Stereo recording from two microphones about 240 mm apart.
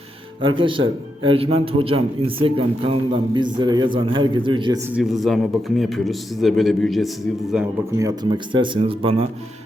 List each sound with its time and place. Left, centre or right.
0.4 s speech: right
4.9 s a man's voice: centre
7.9 s speech: centre